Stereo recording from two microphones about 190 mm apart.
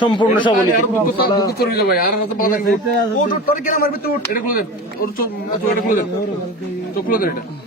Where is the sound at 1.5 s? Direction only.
55° left (ahead or behind).